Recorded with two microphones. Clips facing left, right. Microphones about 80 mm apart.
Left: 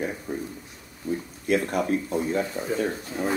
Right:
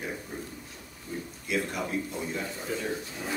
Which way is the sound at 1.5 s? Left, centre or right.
Left.